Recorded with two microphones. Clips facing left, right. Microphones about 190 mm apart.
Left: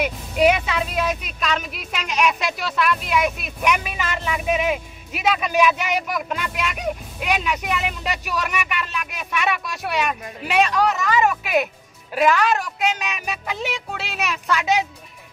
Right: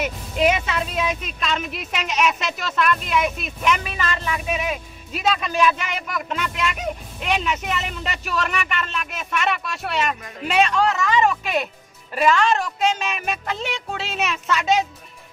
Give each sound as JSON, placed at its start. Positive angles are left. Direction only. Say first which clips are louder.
{"t": 0.0, "sound": "speech", "louder": "left 2 dB", "side_deg": 0}